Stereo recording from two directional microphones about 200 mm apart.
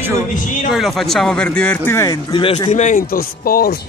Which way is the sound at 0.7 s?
Centre (ahead or behind).